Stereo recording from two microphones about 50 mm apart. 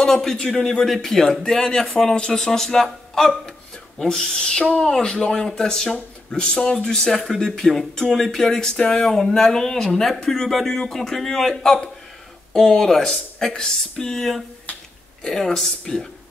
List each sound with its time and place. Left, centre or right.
0.0 s speech: centre